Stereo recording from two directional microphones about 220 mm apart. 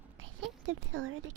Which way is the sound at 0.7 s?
65° right (ahead or behind).